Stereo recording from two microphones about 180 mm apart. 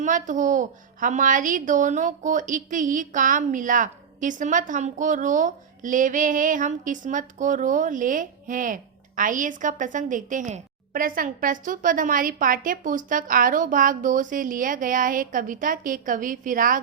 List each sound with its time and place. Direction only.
0.0 s a child's voice: 45° right (ahead or behind)